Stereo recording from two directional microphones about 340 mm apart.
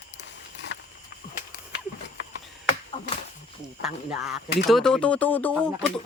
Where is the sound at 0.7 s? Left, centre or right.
Left.